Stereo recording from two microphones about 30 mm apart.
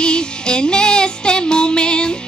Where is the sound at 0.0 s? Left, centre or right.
Left.